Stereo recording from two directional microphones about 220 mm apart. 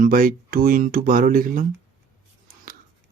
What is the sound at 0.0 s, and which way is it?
Speech, 40° right (ahead or behind).